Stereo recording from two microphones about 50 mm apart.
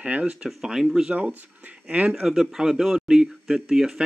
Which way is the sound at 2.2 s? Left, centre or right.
Centre.